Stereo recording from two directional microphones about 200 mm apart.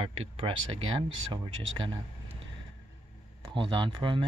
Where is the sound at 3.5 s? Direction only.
25° right (ahead or behind).